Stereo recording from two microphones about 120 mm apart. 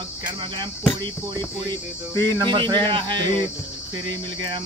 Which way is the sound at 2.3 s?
40° right (ahead or behind).